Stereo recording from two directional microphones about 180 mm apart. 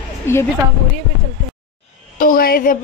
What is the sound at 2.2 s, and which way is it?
Speech, 55° left (ahead or behind).